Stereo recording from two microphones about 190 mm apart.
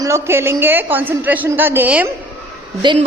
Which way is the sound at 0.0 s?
15° right (ahead or behind).